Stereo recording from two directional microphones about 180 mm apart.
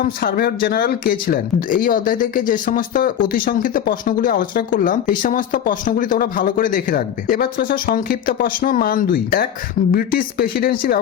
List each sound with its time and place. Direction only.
0.0 s speech: 55° left (ahead or behind)